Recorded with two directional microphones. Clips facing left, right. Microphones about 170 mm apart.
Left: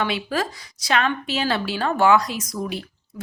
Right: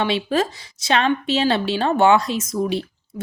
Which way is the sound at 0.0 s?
25° right (ahead or behind).